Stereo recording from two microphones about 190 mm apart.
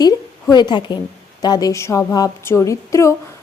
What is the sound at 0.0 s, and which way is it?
A woman's voice, 20° left (ahead or behind).